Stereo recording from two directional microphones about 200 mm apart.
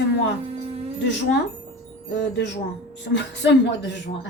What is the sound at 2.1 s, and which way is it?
A woman's voice, 60° left (ahead or behind).